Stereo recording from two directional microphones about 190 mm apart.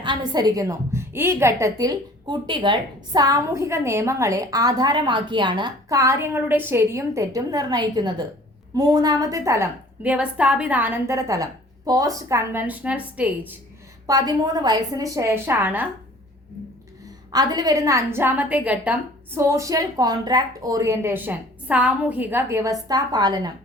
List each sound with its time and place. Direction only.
0.0 s a woman's voice: 25° right (ahead or behind)
14.1 s a woman's voice: 20° right (ahead or behind)
17.3 s a woman's voice: 20° right (ahead or behind)